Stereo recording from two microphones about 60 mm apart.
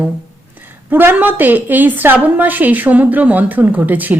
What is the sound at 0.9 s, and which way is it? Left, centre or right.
A woman's voice, right.